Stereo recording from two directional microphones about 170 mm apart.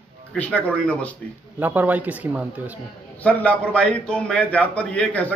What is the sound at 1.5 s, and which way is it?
Speech, 10° right (ahead or behind).